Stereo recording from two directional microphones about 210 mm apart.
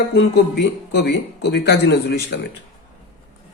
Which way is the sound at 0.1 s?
50° left (ahead or behind).